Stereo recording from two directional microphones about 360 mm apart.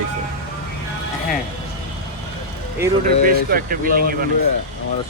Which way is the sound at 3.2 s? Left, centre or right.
Right.